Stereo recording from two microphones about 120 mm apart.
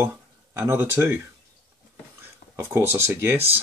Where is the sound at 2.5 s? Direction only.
20° right (ahead or behind).